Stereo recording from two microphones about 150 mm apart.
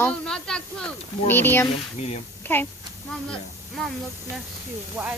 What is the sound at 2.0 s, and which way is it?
Speech, 45° left (ahead or behind).